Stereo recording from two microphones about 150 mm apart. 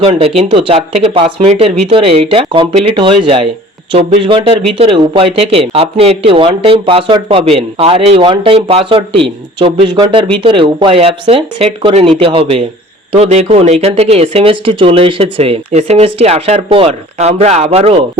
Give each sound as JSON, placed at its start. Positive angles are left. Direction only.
{"t": 0.0, "sound": "speech", "side_deg": -40}